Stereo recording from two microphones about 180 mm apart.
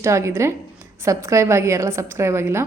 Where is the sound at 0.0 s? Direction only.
15° right (ahead or behind).